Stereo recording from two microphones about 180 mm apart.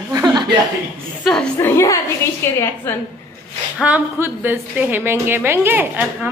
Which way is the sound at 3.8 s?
10° right (ahead or behind).